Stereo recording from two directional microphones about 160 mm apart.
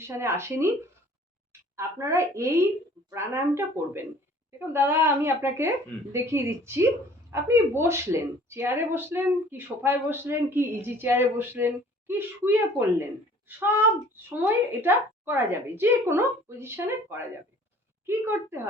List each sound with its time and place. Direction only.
0.0 s a woman's voice: 15° right (ahead or behind)
1.7 s a woman's voice: 20° right (ahead or behind)